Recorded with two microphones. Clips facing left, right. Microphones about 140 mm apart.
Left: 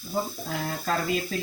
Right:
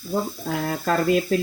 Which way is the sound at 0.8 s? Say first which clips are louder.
Right 8 dB; 60° right (ahead or behind).